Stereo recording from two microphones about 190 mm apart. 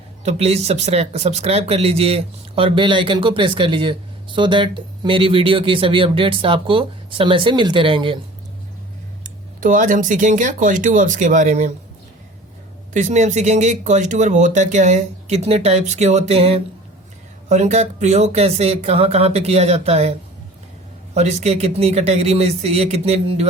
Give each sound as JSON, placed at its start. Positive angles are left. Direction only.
{"t": 0.3, "sound": "speech", "side_deg": -35}
{"t": 9.2, "sound": "speech", "side_deg": -45}
{"t": 12.9, "sound": "speech", "side_deg": -40}
{"t": 21.2, "sound": "speech", "side_deg": -35}